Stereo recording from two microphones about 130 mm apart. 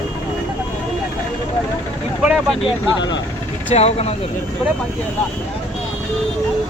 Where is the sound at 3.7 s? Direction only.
55° left (ahead or behind).